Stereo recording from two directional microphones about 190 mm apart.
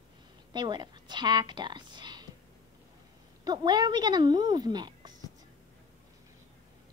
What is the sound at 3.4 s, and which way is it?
Speech, 20° right (ahead or behind).